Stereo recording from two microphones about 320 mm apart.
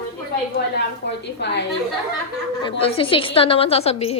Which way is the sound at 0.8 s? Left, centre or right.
Left.